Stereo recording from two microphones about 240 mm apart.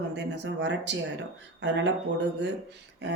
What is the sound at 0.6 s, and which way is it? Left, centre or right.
Speech, right.